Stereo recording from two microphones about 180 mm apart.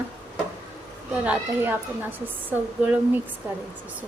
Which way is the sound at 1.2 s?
10° right (ahead or behind).